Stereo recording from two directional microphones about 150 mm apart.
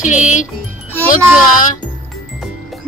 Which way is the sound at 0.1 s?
55° left (ahead or behind).